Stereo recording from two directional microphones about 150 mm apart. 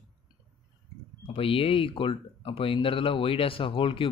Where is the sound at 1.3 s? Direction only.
40° left (ahead or behind).